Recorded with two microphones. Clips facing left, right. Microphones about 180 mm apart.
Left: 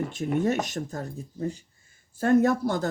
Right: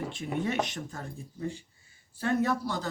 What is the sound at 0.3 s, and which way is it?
Speech, 45° left (ahead or behind).